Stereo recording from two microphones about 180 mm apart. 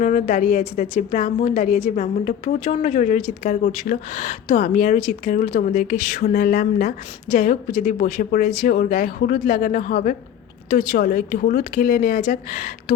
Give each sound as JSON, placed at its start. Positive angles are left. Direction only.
{"t": 0.0, "sound": "a woman's voice", "side_deg": 45}